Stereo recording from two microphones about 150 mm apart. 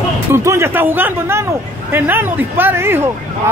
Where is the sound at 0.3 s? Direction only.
15° right (ahead or behind).